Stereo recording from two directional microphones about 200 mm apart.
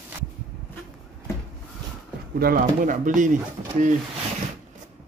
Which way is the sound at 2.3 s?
45° right (ahead or behind).